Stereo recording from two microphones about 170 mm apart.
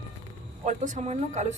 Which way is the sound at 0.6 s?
45° right (ahead or behind).